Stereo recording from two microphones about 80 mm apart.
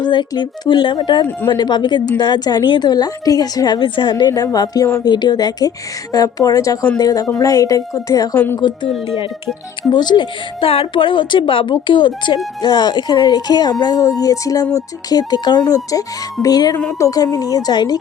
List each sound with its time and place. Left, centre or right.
0.0 s speech: left
2.9 s speech: left
4.5 s a woman's voice: left
5.0 s a woman's voice: left
8.5 s speech: left
9.9 s speech: left
10.9 s speech: left
12.6 s speech: left
15.6 s a woman's voice: left